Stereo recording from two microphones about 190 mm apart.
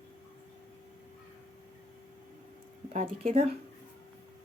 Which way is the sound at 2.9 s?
40° right (ahead or behind).